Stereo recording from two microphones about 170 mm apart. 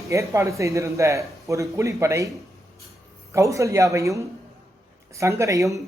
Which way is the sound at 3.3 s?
20° right (ahead or behind).